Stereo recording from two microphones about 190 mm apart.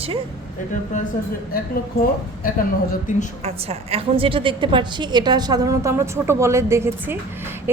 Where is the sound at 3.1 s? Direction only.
40° left (ahead or behind).